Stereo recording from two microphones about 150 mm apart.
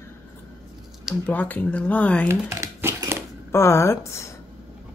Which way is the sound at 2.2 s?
20° right (ahead or behind).